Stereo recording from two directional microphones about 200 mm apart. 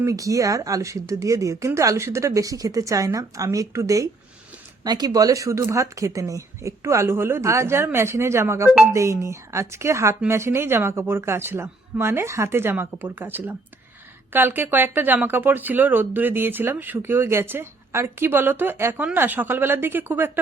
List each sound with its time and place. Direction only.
0.0 s speech: 15° right (ahead or behind)